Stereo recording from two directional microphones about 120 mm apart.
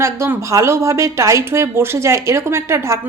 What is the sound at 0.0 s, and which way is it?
A woman's voice, 20° right (ahead or behind).